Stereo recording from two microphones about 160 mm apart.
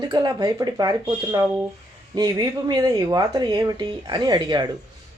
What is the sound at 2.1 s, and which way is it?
Speech, 25° right (ahead or behind).